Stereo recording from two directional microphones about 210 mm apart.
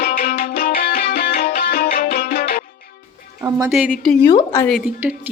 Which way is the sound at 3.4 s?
10° right (ahead or behind).